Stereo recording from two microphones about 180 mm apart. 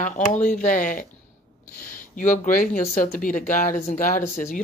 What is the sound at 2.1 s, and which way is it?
Speech, 45° left (ahead or behind).